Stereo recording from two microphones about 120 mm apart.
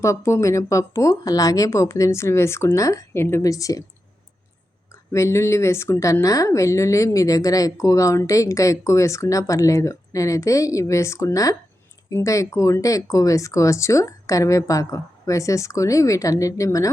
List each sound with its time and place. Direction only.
0.0 s a woman's voice: 25° left (ahead or behind)
5.1 s a woman's voice: 25° left (ahead or behind)